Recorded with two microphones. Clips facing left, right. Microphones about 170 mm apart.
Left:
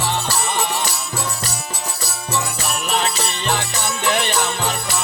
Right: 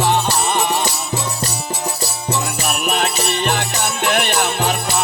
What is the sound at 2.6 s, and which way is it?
Music, 60° right (ahead or behind).